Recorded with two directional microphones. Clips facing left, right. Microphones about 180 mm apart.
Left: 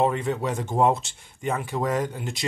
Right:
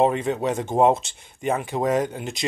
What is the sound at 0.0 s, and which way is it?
Speech, 20° right (ahead or behind).